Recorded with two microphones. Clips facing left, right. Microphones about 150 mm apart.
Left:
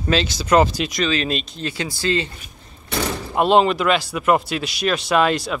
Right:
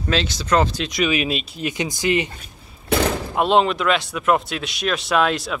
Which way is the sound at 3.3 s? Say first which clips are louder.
Left 3 dB; centre (ahead or behind).